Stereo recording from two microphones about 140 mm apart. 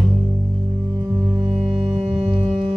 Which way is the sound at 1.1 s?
20° right (ahead or behind).